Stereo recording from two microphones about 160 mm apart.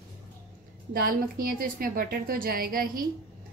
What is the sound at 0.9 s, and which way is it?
A woman's voice, 65° right (ahead or behind).